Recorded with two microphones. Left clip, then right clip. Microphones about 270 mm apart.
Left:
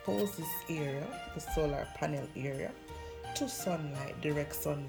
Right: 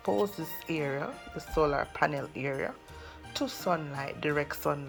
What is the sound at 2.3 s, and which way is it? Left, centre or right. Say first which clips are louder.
Speech: right 6 dB; right.